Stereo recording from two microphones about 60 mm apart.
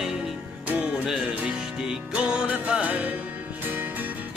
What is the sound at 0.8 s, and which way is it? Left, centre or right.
Music, centre.